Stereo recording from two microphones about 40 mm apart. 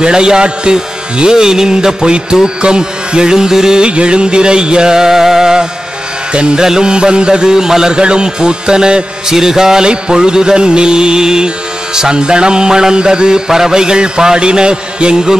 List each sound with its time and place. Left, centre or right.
0.0 s a man's voice: centre
3.8 s a man's voice: right